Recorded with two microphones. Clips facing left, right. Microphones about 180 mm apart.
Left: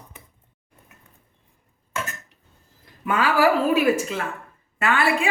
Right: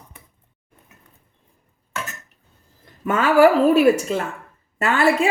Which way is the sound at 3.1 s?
45° right (ahead or behind).